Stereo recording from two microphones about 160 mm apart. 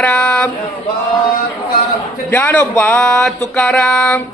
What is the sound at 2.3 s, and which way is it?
A man's voice, 10° left (ahead or behind).